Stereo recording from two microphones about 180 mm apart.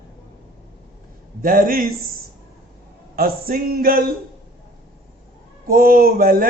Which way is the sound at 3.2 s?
55° right (ahead or behind).